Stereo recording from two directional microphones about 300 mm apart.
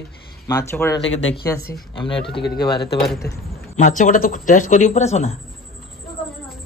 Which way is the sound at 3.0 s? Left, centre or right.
Centre.